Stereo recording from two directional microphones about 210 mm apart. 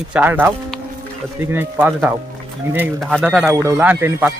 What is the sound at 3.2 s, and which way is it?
Speech, 5° right (ahead or behind).